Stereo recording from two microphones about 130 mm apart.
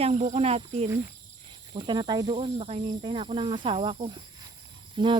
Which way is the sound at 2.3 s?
50° right (ahead or behind).